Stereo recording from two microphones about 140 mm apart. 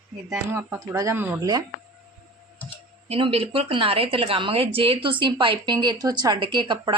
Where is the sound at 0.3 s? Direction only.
20° right (ahead or behind).